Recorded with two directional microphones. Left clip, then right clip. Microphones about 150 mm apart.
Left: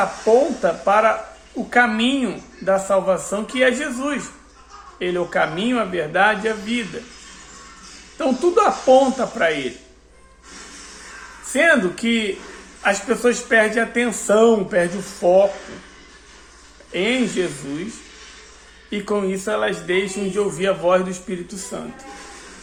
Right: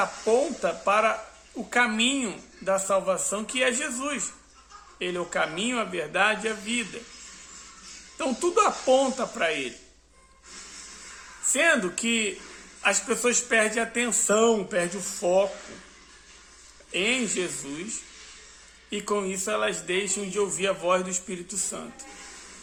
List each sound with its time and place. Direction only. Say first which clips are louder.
0.3 s speech: left 9 dB; 20° right (ahead or behind)
8.2 s speech: left 7 dB; 20° right (ahead or behind)
11.5 s speech: left 7 dB; 25° right (ahead or behind)
16.9 s speech: left 5 dB; 20° right (ahead or behind)